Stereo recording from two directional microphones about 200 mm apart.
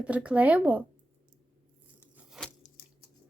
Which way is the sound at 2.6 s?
35° left (ahead or behind).